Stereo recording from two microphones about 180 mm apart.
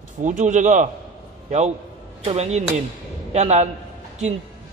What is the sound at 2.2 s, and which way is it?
A man's voice, 35° right (ahead or behind).